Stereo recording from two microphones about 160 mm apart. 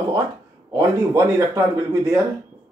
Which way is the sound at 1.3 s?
20° right (ahead or behind).